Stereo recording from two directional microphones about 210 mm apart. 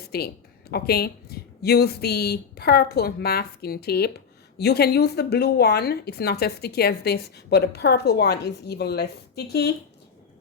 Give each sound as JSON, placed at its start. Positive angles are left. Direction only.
{"t": 0.1, "sound": "a woman's voice", "side_deg": 50}